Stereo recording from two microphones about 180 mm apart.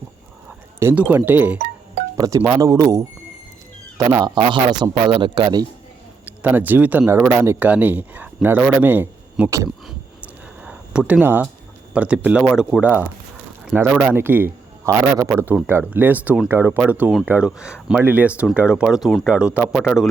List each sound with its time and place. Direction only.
0.8 s a man's voice: 10° right (ahead or behind)
6.2 s a man's voice: 10° right (ahead or behind)
10.6 s a sound: 5° right (ahead or behind)
11.9 s a man's voice: 5° right (ahead or behind)